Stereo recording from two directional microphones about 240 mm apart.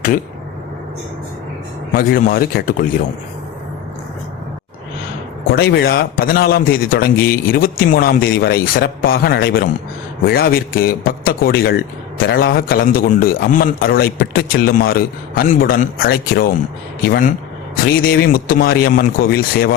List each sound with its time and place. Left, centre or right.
2.0 s a man's voice: left
5.5 s a man's voice: left